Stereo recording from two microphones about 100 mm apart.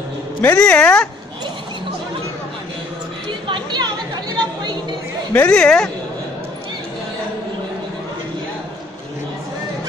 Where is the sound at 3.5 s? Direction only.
50° right (ahead or behind).